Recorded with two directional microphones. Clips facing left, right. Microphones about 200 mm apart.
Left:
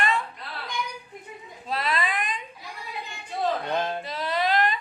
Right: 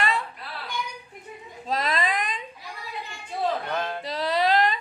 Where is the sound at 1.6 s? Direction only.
40° right (ahead or behind).